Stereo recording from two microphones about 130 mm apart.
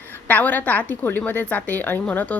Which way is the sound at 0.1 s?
15° left (ahead or behind).